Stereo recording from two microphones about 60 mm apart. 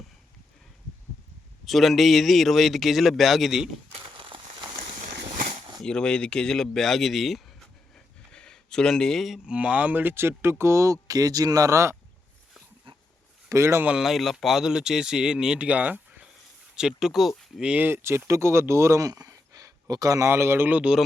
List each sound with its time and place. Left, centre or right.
1.6 s speech: centre
5.8 s speech: centre
7.9 s a sound: centre
9.5 s speech: right
11.1 s speech: right
13.5 s speech: right
14.0 s speech: centre; by 16.2 s right
16.7 s speech: centre
17.7 s speech: right
19.0 s a sound: right
20.2 s speech: right
20.7 s speech: right